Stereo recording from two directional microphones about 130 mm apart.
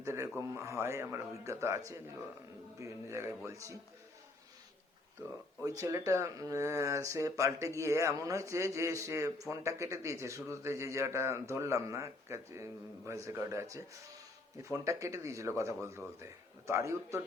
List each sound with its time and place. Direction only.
0.0 s speech: 20° right (ahead or behind)
5.6 s speech: 25° right (ahead or behind)